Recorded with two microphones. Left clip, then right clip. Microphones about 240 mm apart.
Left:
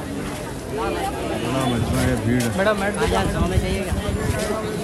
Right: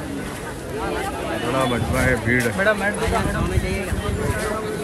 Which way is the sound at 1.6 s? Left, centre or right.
Centre.